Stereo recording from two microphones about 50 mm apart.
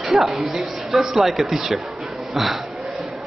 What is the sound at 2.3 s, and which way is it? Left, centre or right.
Speech, centre.